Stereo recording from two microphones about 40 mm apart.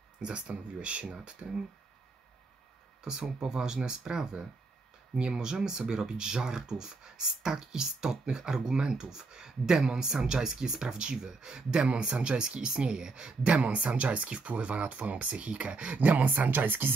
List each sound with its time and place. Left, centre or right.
0.2 s speech: right
1.4 s speech: centre
3.0 s speech: centre; by 16.9 s right